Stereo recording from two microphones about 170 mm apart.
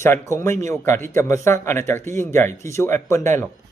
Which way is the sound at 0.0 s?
15° left (ahead or behind).